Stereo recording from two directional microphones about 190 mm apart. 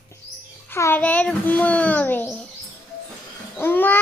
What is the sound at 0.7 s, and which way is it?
A child's voice, 10° left (ahead or behind).